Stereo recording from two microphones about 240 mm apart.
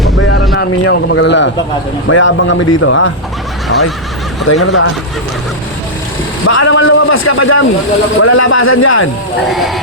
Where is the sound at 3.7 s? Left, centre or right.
Left.